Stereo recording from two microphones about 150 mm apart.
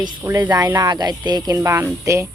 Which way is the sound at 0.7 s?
25° right (ahead or behind).